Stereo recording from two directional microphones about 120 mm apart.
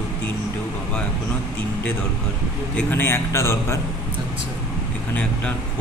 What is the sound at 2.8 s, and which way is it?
A man's voice, 15° left (ahead or behind).